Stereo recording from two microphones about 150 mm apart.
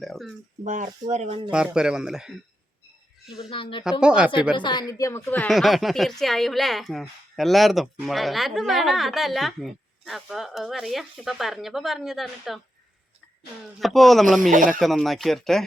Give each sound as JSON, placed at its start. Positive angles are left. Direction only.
{"t": 0.0, "sound": "a sound", "side_deg": 0}
{"t": 0.6, "sound": "speech", "side_deg": -55}
{"t": 1.5, "sound": "speech", "side_deg": -5}
{"t": 3.5, "sound": "speech", "side_deg": 35}
{"t": 4.0, "sound": "speech", "side_deg": -5}
{"t": 4.5, "sound": "speech", "side_deg": 30}
{"t": 13.7, "sound": "speech", "side_deg": 0}